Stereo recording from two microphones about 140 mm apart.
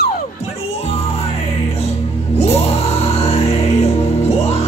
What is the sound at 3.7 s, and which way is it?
Music, 50° left (ahead or behind).